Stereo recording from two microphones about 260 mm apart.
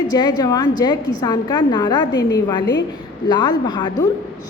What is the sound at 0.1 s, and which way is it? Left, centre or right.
A woman's voice, centre.